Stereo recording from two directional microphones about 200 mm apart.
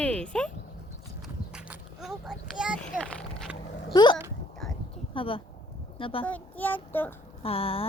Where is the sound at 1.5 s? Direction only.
5° right (ahead or behind).